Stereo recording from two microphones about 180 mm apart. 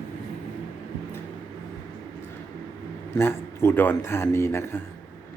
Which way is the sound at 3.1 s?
15° left (ahead or behind).